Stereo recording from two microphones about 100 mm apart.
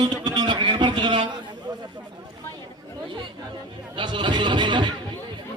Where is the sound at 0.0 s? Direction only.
45° right (ahead or behind).